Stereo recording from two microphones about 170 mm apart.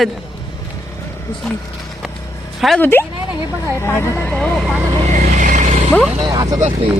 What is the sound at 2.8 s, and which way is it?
A woman's voice, 10° left (ahead or behind).